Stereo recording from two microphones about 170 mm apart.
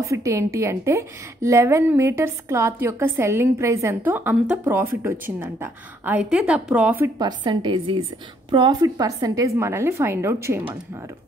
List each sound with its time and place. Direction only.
0.0 s a woman's voice: 20° right (ahead or behind)
7.2 s a woman's voice: 25° right (ahead or behind)